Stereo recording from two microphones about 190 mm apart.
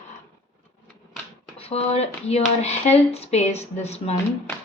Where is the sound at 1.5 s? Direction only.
30° left (ahead or behind).